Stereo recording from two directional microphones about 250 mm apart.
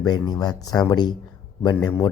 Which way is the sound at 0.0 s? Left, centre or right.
Centre.